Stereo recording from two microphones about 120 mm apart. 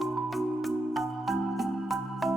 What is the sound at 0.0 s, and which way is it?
Music, centre (ahead or behind).